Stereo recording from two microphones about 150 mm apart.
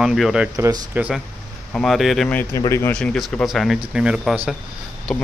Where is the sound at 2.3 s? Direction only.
15° left (ahead or behind).